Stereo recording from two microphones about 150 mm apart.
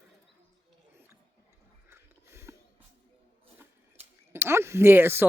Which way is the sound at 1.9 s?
20° right (ahead or behind).